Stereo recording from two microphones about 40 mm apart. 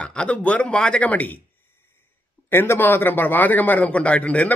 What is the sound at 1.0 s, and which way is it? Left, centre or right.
Speech, left.